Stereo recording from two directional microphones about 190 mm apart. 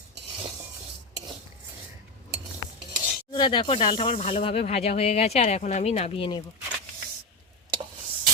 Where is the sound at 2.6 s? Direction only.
75° left (ahead or behind).